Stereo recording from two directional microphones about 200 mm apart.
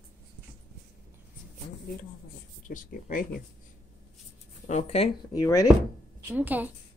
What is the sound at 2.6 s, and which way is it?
Speech, 40° left (ahead or behind).